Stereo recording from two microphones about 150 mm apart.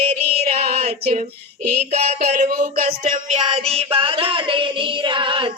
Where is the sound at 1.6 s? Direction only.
50° right (ahead or behind).